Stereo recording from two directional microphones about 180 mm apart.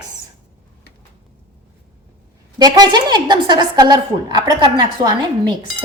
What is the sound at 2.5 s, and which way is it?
A woman's voice, 20° right (ahead or behind).